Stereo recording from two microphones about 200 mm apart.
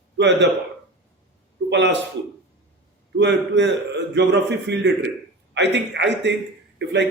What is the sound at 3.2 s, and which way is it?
Speech, 60° right (ahead or behind).